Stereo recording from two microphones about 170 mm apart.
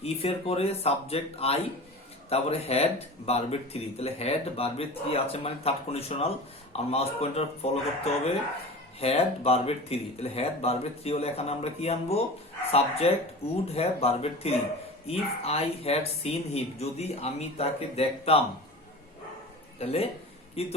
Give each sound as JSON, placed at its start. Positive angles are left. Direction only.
{"t": 0.0, "sound": "speech", "side_deg": 35}
{"t": 19.8, "sound": "speech", "side_deg": 35}